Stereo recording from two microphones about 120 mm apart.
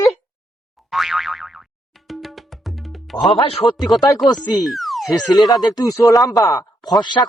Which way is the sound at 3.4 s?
50° left (ahead or behind).